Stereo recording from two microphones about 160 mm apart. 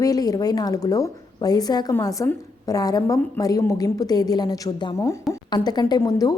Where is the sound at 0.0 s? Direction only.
25° left (ahead or behind).